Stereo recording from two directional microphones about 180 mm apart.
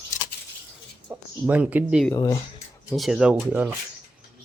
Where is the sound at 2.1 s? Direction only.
20° left (ahead or behind).